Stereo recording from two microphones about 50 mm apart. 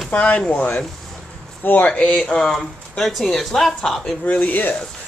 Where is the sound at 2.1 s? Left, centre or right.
Centre.